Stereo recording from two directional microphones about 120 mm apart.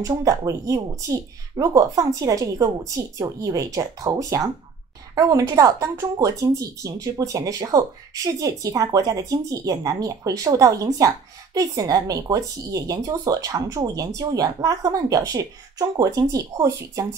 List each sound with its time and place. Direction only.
0.0 s speech: 30° right (ahead or behind)